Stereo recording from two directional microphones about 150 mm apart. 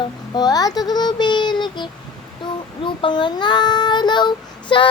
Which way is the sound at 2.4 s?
30° left (ahead or behind).